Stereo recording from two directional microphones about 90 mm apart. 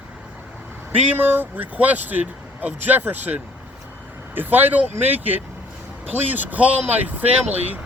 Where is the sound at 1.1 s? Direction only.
20° right (ahead or behind).